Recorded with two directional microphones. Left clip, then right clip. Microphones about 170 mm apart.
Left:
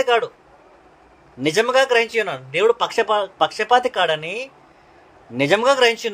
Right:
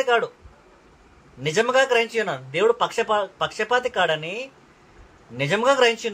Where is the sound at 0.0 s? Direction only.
50° left (ahead or behind).